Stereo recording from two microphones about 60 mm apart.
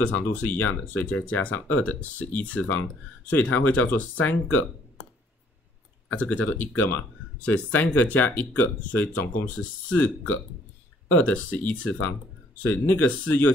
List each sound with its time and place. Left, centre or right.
0.0 s speech: left
6.1 s speech: left